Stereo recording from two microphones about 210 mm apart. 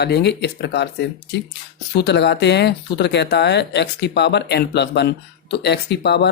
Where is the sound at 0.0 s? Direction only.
55° left (ahead or behind).